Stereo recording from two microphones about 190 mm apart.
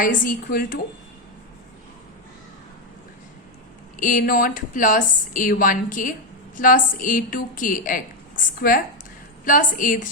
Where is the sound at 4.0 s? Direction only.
45° left (ahead or behind).